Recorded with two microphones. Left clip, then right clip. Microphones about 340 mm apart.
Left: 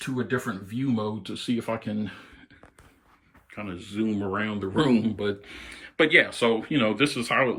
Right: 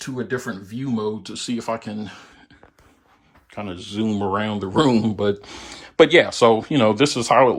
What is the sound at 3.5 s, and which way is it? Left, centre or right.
Speech, centre.